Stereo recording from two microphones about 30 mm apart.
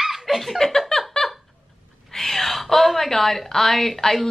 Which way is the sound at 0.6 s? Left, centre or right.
Centre.